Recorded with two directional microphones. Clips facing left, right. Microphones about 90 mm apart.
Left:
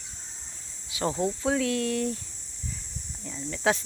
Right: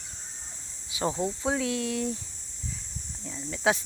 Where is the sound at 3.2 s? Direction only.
5° right (ahead or behind).